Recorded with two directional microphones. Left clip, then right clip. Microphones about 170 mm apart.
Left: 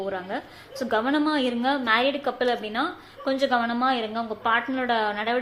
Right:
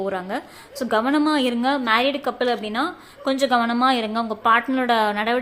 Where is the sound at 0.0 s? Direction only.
30° right (ahead or behind).